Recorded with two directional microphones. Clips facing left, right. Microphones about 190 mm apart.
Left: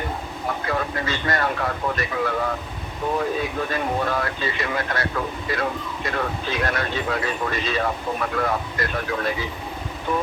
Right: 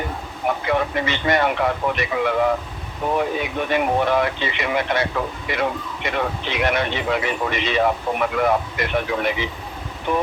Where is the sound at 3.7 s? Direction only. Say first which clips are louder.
Right 5 dB; 15° right (ahead or behind).